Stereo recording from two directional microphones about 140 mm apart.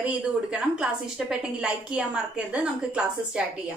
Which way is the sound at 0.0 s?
5° right (ahead or behind).